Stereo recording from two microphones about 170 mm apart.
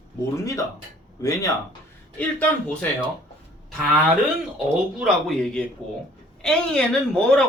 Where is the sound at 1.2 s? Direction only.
20° left (ahead or behind).